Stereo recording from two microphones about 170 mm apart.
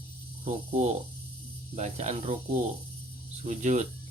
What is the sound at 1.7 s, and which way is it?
Speech, 40° right (ahead or behind).